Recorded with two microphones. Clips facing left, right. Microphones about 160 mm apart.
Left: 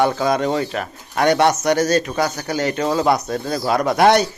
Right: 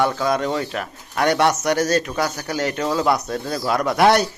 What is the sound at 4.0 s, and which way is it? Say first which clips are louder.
Speech: left 1 dB; 5° right (ahead or behind).